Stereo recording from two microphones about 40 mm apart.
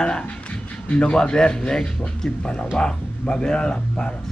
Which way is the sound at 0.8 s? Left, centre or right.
Left.